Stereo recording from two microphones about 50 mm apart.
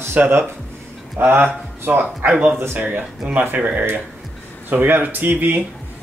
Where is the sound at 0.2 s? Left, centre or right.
Right.